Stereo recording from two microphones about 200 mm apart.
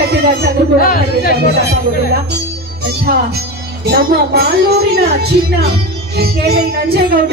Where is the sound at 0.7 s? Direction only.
45° left (ahead or behind).